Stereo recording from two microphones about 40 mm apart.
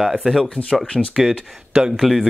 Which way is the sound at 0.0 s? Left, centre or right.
Centre.